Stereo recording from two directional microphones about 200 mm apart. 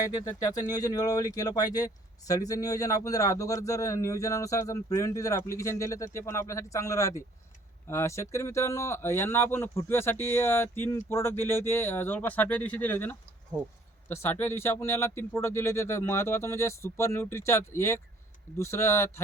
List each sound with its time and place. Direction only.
0.0 s speech: 20° left (ahead or behind)